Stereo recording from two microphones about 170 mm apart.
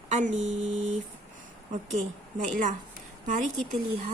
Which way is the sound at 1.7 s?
45° right (ahead or behind).